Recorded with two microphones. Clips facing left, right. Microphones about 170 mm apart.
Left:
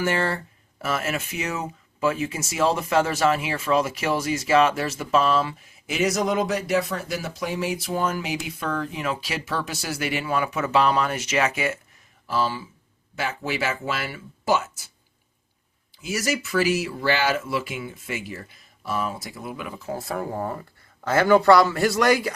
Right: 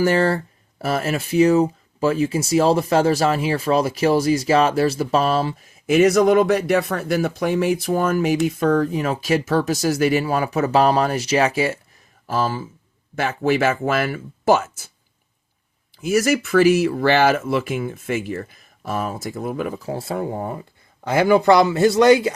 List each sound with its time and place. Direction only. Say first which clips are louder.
0.0 s speech: right 7 dB; 35° right (ahead or behind)
5.9 s speech: right 9 dB; 55° right (ahead or behind); by 11.8 s 35° right (ahead or behind)
12.3 s speech: right 3 dB; 45° right (ahead or behind)
16.0 s speech: right 9 dB; 55° right (ahead or behind)
19.9 s speech: right 4 dB; 30° right (ahead or behind)